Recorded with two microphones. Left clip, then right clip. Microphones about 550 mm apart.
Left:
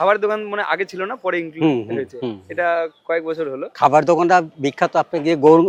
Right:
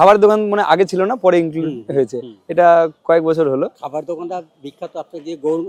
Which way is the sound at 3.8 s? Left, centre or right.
Left.